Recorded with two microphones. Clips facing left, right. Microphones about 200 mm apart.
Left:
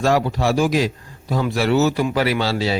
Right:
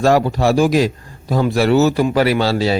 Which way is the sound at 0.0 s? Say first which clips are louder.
Right 4 dB; 40° right (ahead or behind).